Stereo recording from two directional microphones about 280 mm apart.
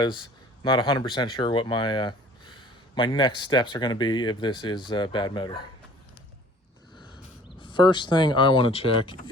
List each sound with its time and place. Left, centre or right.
0.0 s speech: centre
7.6 s speech: centre